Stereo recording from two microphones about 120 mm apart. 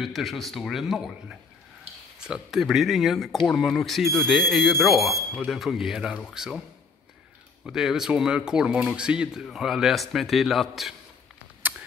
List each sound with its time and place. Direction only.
0.0 s speech: centre (ahead or behind)
7.6 s speech: 5° right (ahead or behind)